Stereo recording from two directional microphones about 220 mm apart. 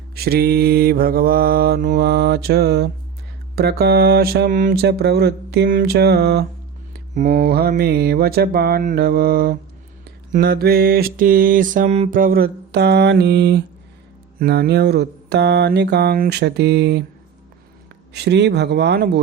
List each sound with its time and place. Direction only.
0.1 s mantra: 45° right (ahead or behind)
18.1 s mantra: 50° right (ahead or behind)